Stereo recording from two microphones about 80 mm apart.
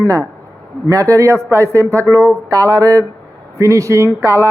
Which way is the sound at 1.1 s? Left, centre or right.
Right.